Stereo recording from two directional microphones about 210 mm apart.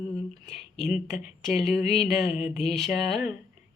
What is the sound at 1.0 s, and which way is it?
Speech, 30° left (ahead or behind).